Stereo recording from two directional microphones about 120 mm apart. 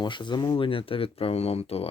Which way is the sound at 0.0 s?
40° left (ahead or behind).